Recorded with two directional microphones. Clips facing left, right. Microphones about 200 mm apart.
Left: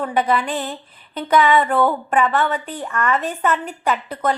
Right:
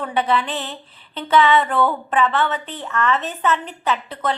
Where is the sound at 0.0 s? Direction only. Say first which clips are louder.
Left 1 dB; 10° left (ahead or behind).